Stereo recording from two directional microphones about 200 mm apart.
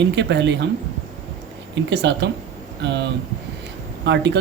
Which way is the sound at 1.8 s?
60° right (ahead or behind).